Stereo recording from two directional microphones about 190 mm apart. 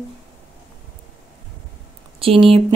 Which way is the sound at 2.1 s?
30° right (ahead or behind).